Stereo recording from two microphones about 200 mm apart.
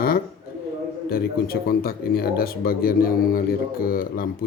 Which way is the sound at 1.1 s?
50° left (ahead or behind).